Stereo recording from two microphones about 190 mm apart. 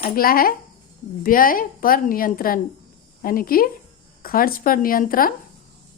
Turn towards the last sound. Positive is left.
turn(degrees=50)  # may be behind; listen again after turning